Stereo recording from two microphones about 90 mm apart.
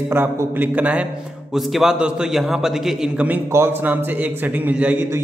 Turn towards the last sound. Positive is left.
turn(degrees=-20)  # may be behind; listen again after turning